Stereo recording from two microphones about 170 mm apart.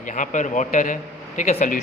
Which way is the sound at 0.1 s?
45° left (ahead or behind).